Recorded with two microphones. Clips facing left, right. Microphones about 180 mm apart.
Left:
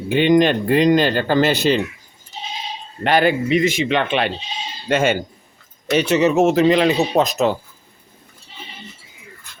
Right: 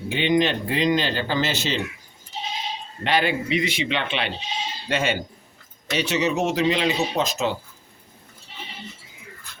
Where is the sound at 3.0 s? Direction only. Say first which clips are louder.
Left 6 dB; 50° left (ahead or behind).